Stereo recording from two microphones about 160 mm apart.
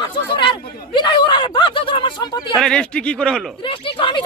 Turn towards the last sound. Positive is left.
turn(degrees=35)  # may be behind; listen again after turning